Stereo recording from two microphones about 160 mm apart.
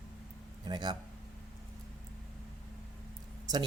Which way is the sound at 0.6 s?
25° right (ahead or behind).